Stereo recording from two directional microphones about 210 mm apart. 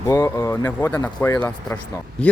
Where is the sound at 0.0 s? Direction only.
15° left (ahead or behind).